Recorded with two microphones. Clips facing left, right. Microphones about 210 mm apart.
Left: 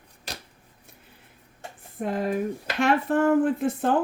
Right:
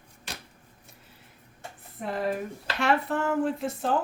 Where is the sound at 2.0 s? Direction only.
45° left (ahead or behind).